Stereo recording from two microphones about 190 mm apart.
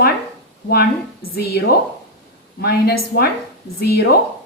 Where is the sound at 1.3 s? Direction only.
55° left (ahead or behind).